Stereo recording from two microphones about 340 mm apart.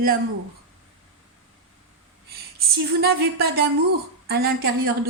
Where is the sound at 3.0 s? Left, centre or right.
Right.